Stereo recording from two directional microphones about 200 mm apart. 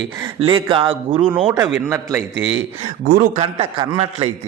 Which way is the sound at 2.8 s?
45° right (ahead or behind).